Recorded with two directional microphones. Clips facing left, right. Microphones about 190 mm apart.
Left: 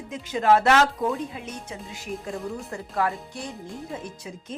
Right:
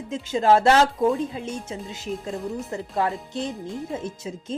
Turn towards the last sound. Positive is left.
turn(degrees=-25)  # may be behind; listen again after turning